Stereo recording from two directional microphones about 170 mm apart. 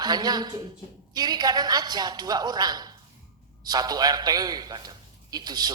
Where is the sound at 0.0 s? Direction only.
25° right (ahead or behind).